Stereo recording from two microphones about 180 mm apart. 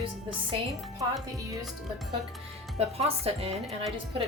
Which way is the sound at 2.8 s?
35° right (ahead or behind).